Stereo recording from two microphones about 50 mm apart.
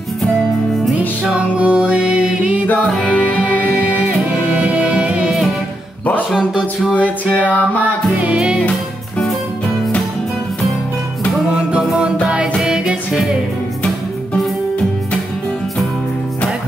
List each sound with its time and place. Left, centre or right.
1.3 s music: right
3.1 s music: left
4.6 s music: right
6.9 s music: left
8.2 s music: right
12.6 s music: centre